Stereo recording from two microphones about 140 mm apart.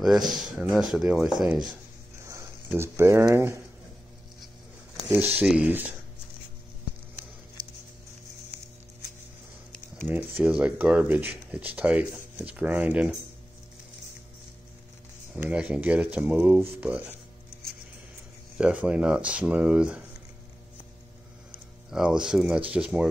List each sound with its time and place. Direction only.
0.3 s speech: centre (ahead or behind)
2.2 s speech: 20° right (ahead or behind)
5.4 s speech: 10° right (ahead or behind)
7.6 s a sound: 30° right (ahead or behind)
10.0 s speech: 15° right (ahead or behind)
15.3 s speech: 10° right (ahead or behind)
18.6 s speech: 10° right (ahead or behind)
21.9 s speech: 5° right (ahead or behind)